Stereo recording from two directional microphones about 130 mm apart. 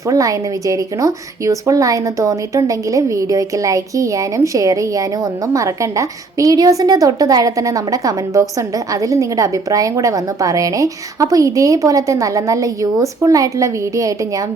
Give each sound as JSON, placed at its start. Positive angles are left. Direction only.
{"t": 0.1, "sound": "a woman's voice", "side_deg": -25}